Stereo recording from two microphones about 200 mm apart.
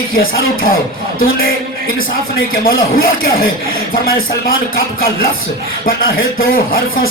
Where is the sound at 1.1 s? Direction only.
50° left (ahead or behind).